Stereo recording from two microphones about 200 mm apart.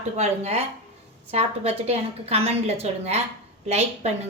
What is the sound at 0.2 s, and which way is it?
A woman's voice, 30° right (ahead or behind).